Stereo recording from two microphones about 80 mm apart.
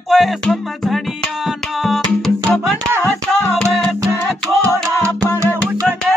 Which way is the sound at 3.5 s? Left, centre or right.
Centre.